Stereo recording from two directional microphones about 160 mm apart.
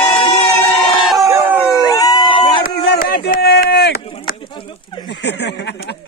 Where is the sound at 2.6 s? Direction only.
70° left (ahead or behind).